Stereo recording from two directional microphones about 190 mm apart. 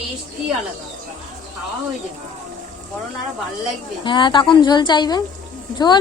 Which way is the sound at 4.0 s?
25° left (ahead or behind).